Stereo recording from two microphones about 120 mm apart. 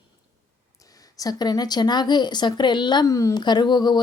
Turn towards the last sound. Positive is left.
turn(degrees=35)  # may be behind; listen again after turning